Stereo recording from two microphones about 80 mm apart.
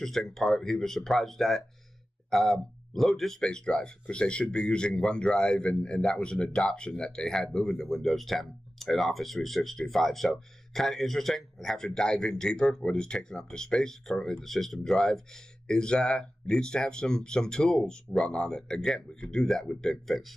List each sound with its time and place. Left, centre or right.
0.0 s speech: centre